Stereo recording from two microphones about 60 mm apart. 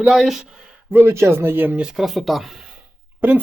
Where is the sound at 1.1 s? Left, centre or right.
Right.